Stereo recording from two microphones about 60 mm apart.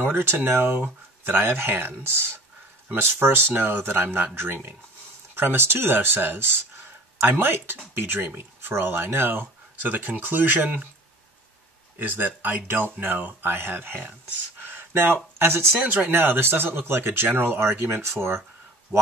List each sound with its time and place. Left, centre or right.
0.0 s speech: right
12.0 s speech: right
14.6 s a sound: right
15.3 s speech: right
15.8 s speech: right